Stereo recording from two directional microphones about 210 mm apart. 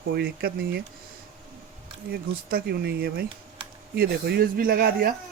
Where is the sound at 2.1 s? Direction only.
50° right (ahead or behind).